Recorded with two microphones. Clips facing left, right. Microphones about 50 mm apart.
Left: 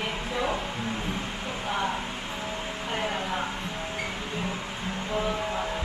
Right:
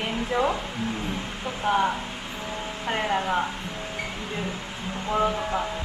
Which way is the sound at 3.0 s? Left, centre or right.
Centre.